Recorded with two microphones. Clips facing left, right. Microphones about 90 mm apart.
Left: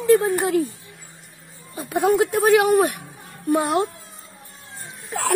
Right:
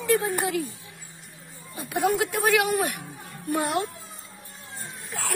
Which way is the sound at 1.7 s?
30° left (ahead or behind).